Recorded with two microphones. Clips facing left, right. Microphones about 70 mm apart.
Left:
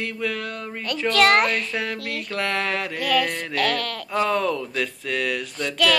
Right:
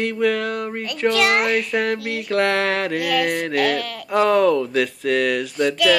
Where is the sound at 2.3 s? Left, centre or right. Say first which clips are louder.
Right 7 dB; right.